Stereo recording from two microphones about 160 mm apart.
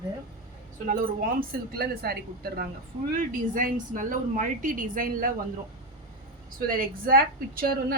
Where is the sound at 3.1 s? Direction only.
55° right (ahead or behind).